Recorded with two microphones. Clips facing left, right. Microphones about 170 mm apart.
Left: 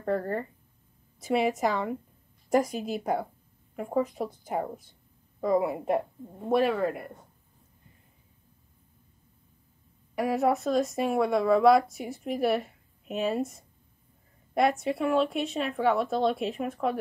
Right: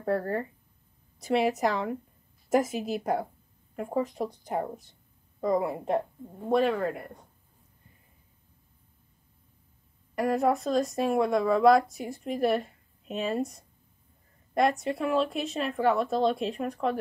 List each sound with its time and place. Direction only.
0.0 s speech: 5° right (ahead or behind)
10.1 s speech: centre (ahead or behind)